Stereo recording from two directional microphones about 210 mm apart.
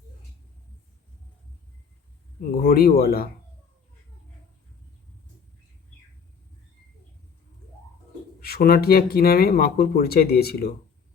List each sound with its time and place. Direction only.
2.4 s speech: 45° left (ahead or behind)
8.4 s speech: 45° left (ahead or behind)